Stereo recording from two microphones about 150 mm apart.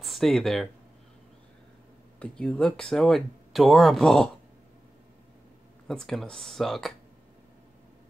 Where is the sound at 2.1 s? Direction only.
5° left (ahead or behind).